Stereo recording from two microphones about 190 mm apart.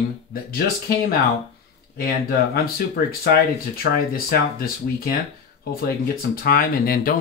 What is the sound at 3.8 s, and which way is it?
Speech, 50° left (ahead or behind).